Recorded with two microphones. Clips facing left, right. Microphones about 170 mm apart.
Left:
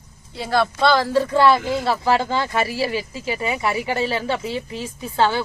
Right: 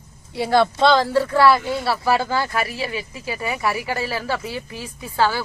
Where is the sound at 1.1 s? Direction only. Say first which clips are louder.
Even; 20° left (ahead or behind).